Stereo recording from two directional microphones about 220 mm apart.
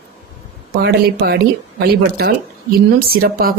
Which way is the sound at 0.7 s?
45° right (ahead or behind).